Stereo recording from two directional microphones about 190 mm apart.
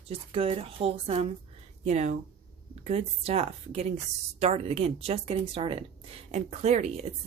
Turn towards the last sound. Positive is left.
turn(degrees=-35)  # may be behind; listen again after turning